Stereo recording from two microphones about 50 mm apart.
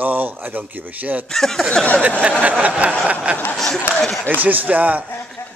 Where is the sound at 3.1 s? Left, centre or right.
Right.